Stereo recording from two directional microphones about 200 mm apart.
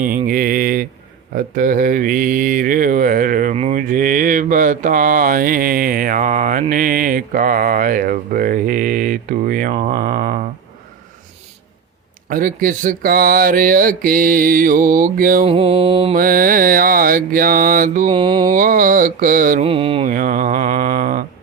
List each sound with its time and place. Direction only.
0.0 s mantra: 45° right (ahead or behind)
12.3 s mantra: 45° right (ahead or behind)
15.4 s mantra: 30° right (ahead or behind)
16.1 s mantra: 45° right (ahead or behind)
18.1 s mantra: 25° right (ahead or behind)
18.5 s mantra: 45° right (ahead or behind)
19.6 s mantra: 25° right (ahead or behind)
20.1 s mantra: 40° right (ahead or behind)